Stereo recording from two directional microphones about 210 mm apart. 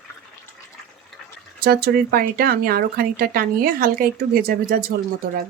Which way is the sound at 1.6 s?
50° right (ahead or behind).